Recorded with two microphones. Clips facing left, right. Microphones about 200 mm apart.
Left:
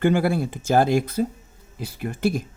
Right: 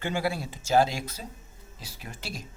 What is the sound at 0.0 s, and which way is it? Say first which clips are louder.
Speech: left 10 dB; 55° left (ahead or behind).